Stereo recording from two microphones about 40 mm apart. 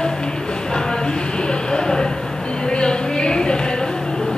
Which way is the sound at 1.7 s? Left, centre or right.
Centre.